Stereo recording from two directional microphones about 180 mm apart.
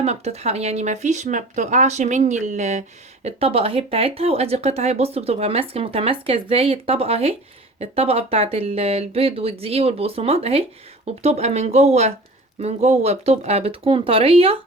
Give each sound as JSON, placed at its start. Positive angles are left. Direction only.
{"t": 0.0, "sound": "speech", "side_deg": -35}